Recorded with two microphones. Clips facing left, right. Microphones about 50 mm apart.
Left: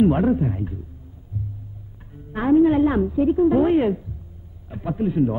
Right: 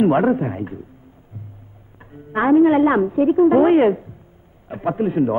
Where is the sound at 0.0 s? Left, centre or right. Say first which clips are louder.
Right 2 dB; right.